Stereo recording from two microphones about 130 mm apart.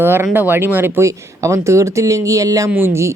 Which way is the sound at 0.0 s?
15° right (ahead or behind).